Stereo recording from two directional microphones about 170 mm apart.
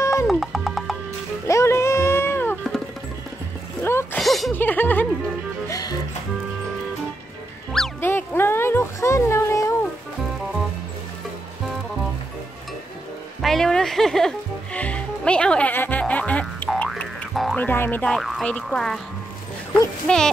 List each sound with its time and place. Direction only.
0.0 s music: 15° left (ahead or behind)
0.3 s music: centre (ahead or behind)
1.5 s a sound: 15° left (ahead or behind)
3.8 s a sound: 15° left (ahead or behind)
4.2 s music: centre (ahead or behind)
4.6 s music: 10° left (ahead or behind)
5.7 s music: 20° left (ahead or behind)
8.0 s a sound: 15° left (ahead or behind)
13.4 s music: centre (ahead or behind)
17.6 s speech: 10° left (ahead or behind)
20.1 s speech: 5° left (ahead or behind)